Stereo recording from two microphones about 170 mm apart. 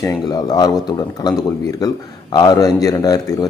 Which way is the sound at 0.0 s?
25° left (ahead or behind).